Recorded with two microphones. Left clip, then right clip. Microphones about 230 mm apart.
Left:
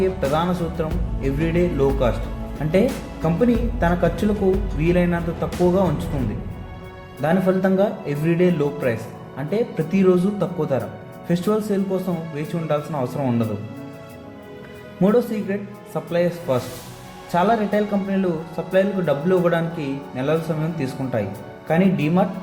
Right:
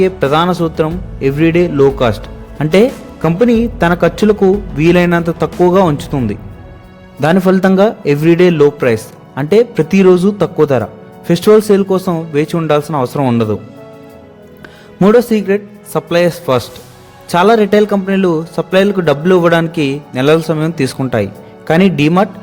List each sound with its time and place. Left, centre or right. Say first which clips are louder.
0.0 s a man's voice: right 9 dB; right
7.2 s a man's voice: right 9 dB; right
15.0 s a man's voice: right 10 dB; right